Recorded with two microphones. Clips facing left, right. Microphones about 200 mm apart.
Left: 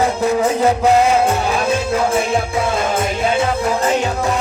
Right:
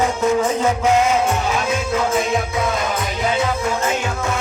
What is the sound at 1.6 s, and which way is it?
Music, 30° left (ahead or behind).